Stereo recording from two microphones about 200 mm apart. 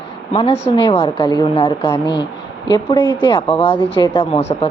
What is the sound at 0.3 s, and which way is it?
Speech, 25° left (ahead or behind).